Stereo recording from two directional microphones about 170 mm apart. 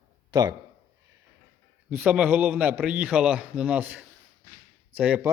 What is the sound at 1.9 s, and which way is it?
A man's voice, 10° right (ahead or behind).